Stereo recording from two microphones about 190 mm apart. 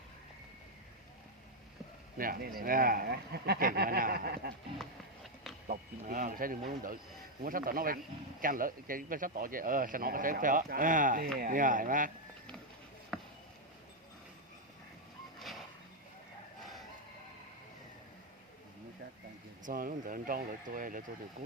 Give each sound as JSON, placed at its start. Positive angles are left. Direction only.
{"t": 2.1, "sound": "speech", "side_deg": -50}
{"t": 5.6, "sound": "speech", "side_deg": -45}
{"t": 13.1, "sound": "a sound", "side_deg": 5}
{"t": 15.4, "sound": "vehicle", "side_deg": 0}
{"t": 19.6, "sound": "speech", "side_deg": -45}